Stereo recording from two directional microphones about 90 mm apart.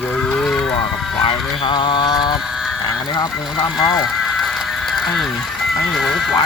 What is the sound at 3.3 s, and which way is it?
Cattle, centre (ahead or behind).